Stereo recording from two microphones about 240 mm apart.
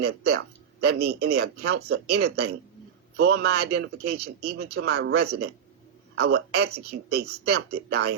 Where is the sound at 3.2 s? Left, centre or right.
Right.